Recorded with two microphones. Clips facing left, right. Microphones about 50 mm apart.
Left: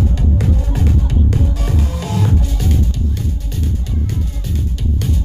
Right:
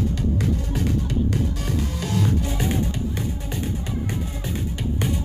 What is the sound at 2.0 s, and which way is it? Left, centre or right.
Music, left.